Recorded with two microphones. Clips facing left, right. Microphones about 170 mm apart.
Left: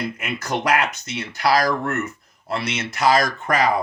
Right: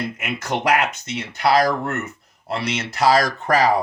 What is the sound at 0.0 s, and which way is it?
Speech, 25° right (ahead or behind).